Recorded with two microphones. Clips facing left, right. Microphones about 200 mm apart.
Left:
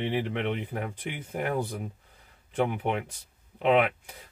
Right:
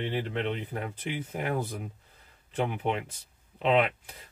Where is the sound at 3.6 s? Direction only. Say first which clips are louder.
Left 2 dB; 10° left (ahead or behind).